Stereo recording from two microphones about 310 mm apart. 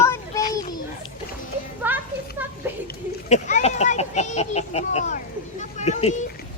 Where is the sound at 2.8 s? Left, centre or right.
Left.